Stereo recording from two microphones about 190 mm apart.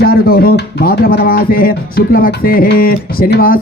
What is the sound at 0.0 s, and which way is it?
Speech, 55° left (ahead or behind).